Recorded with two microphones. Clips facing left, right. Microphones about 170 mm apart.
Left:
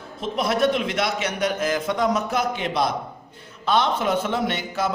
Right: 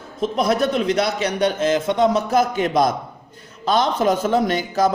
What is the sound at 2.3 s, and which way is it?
A man's voice, 40° right (ahead or behind).